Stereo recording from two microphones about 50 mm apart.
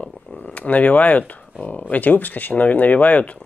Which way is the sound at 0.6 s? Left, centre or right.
Left.